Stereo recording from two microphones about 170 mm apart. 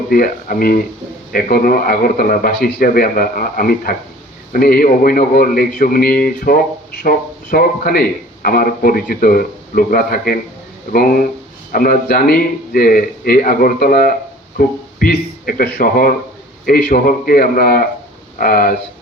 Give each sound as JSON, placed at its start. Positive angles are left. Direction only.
{"t": 0.1, "sound": "a man's voice", "side_deg": 55}